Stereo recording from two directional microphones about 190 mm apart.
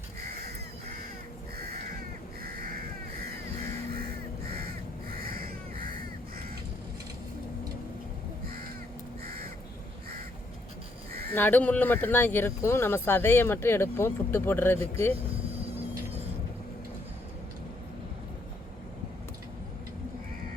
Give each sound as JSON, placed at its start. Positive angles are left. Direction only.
{"t": 2.4, "sound": "crow", "side_deg": -50}
{"t": 3.9, "sound": "crow", "side_deg": -50}
{"t": 9.2, "sound": "crow", "side_deg": -50}
{"t": 11.3, "sound": "speech", "side_deg": 10}